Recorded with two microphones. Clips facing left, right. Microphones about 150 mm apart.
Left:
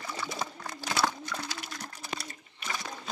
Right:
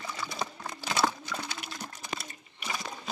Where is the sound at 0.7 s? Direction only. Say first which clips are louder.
Right 1 dB; 20° right (ahead or behind).